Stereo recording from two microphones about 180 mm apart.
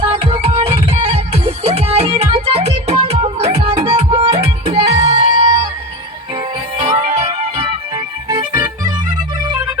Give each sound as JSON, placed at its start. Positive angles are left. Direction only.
{"t": 0.0, "sound": "music", "side_deg": -30}
{"t": 6.7, "sound": "music", "side_deg": -35}